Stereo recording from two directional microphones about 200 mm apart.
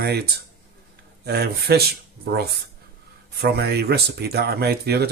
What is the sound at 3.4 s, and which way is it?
Speech, 55° right (ahead or behind).